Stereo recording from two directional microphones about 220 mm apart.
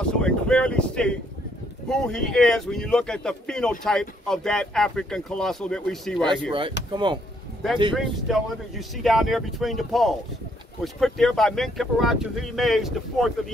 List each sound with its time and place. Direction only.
0.0 s a sound: 5° left (ahead or behind)
1.9 s speech: 5° left (ahead or behind)
6.9 s speech: 20° right (ahead or behind)
7.9 s speech: centre (ahead or behind)